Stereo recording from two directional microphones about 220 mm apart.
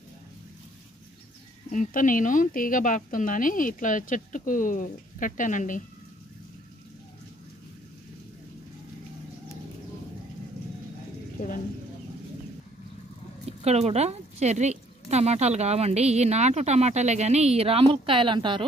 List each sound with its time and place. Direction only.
1.7 s speech: 35° left (ahead or behind)
13.5 s a woman's voice: 30° right (ahead or behind)